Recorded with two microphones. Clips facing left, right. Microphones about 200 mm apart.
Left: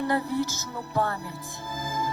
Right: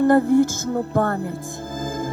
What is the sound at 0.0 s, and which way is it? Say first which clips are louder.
Music: right 11 dB; 50° right (ahead or behind).